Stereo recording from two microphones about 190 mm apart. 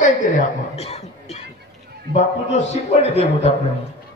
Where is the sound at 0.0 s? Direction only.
40° left (ahead or behind).